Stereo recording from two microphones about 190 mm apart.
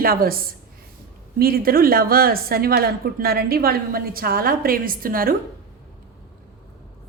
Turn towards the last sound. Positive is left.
turn(degrees=-50)  # may be behind; listen again after turning